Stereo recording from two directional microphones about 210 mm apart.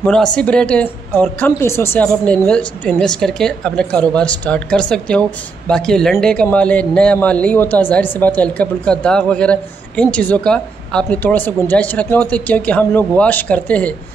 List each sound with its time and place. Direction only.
0.0 s a woman's voice: 5° left (ahead or behind)